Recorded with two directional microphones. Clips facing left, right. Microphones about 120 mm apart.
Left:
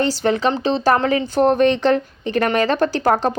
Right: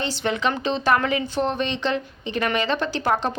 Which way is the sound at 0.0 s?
40° left (ahead or behind).